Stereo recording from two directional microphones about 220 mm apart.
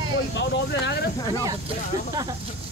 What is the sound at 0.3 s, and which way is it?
Speech, 50° left (ahead or behind).